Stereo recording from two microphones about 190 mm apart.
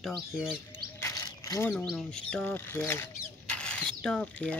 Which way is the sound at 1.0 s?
15° left (ahead or behind).